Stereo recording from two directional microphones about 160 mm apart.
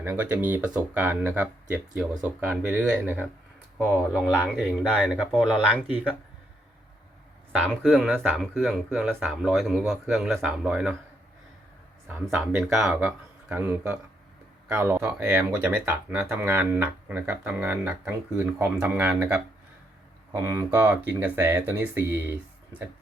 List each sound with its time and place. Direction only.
0.0 s speech: 10° right (ahead or behind)
4.1 s speech: 10° left (ahead or behind)
4.9 s speech: 5° right (ahead or behind)
7.6 s speech: centre (ahead or behind)
12.3 s speech: 10° right (ahead or behind)